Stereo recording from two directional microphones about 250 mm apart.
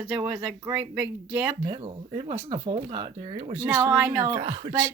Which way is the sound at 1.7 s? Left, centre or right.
Right.